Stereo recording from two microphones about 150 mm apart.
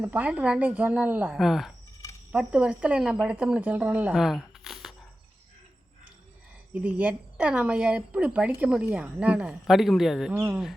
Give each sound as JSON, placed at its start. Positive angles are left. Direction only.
{"t": 0.0, "sound": "a woman's voice", "side_deg": -10}
{"t": 6.7, "sound": "a woman's voice", "side_deg": -10}